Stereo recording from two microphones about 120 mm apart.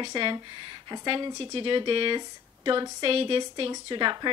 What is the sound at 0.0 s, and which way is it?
A woman's voice, 40° right (ahead or behind).